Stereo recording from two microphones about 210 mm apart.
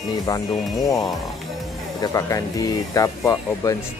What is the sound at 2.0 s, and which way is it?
Speech, 15° left (ahead or behind).